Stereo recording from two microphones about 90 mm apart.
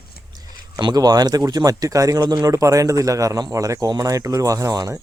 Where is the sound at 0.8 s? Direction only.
50° right (ahead or behind).